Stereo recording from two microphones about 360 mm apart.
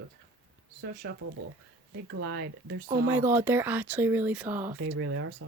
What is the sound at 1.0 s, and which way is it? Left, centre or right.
Speech, right.